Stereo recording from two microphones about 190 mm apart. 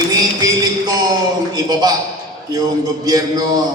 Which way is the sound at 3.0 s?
20° right (ahead or behind).